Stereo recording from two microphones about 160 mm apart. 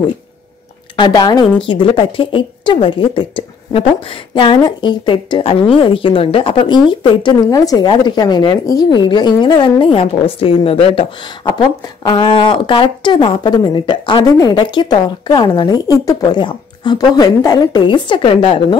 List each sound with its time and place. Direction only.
0.9 s a woman's voice: 25° left (ahead or behind)